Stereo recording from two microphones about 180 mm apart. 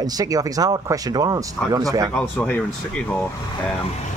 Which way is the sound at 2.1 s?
5° left (ahead or behind).